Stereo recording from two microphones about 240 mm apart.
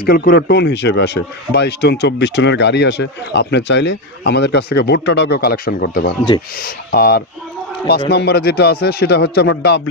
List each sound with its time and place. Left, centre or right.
0.0 s speech: left